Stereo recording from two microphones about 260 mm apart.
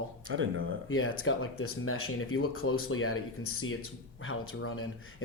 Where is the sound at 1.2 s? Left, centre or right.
Left.